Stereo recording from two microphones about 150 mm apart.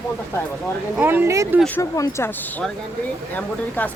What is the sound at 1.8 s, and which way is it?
Speech, 20° left (ahead or behind).